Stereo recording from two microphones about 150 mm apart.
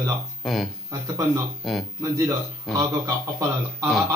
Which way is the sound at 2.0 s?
20° right (ahead or behind).